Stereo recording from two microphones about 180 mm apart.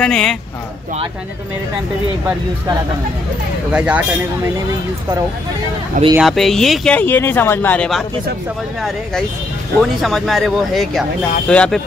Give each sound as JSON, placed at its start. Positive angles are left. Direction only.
{"t": 0.0, "sound": "speech", "side_deg": 5}
{"t": 3.7, "sound": "speech", "side_deg": -5}
{"t": 6.1, "sound": "speech", "side_deg": 0}
{"t": 9.8, "sound": "speech", "side_deg": 0}